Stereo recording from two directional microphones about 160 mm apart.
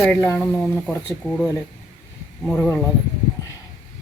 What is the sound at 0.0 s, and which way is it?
Speech, 10° left (ahead or behind).